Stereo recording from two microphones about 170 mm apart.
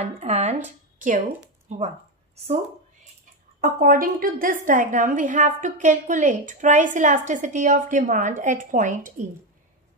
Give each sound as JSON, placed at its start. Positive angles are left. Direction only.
{"t": 0.0, "sound": "speech", "side_deg": -35}
{"t": 0.9, "sound": "a woman's voice", "side_deg": -50}
{"t": 3.6, "sound": "a woman's voice", "side_deg": -55}